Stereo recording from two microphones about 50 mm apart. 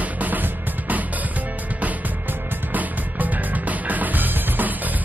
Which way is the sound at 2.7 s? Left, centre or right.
Right.